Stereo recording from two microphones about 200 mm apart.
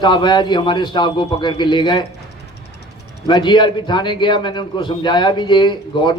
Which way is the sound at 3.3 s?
20° left (ahead or behind).